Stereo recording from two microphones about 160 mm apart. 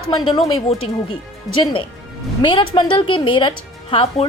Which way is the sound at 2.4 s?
30° left (ahead or behind).